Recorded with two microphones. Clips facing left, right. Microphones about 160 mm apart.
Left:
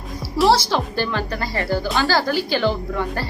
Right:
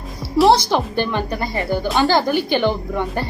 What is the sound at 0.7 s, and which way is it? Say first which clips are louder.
Speech: right 3 dB; 15° right (ahead or behind).